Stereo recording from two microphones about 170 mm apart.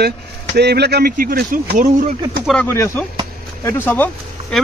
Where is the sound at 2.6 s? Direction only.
15° left (ahead or behind).